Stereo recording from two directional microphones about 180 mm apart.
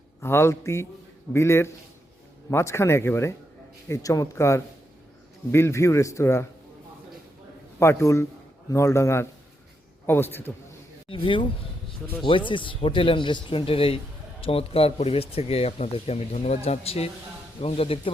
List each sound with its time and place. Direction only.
0.2 s a man's voice: 15° left (ahead or behind)
7.8 s a man's voice: 15° left (ahead or behind)
11.1 s speech: 30° left (ahead or behind)
12.5 s speech: 30° left (ahead or behind)